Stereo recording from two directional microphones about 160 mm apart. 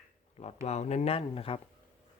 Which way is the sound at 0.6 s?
45° left (ahead or behind).